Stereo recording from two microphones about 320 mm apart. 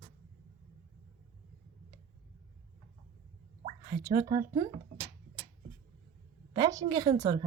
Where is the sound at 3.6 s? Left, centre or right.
Centre.